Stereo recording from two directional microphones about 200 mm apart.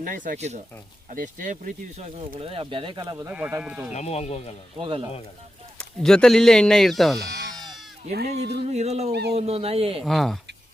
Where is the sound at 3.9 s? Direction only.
30° left (ahead or behind).